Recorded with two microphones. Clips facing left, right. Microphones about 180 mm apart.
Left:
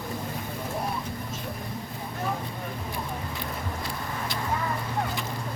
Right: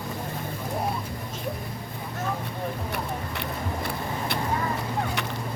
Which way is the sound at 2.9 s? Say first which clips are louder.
Right 2 dB; 70° right (ahead or behind).